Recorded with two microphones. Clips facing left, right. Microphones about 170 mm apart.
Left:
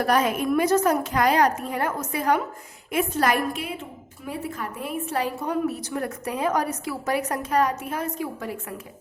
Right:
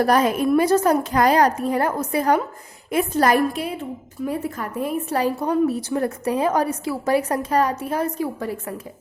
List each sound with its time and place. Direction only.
0.0 s a woman's voice: 35° right (ahead or behind)